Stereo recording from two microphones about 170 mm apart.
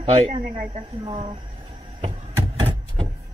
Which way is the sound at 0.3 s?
45° right (ahead or behind).